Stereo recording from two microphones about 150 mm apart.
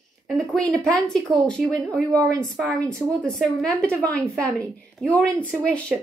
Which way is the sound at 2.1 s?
25° right (ahead or behind).